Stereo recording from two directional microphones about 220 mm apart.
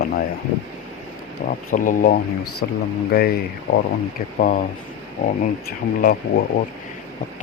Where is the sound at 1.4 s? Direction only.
35° left (ahead or behind).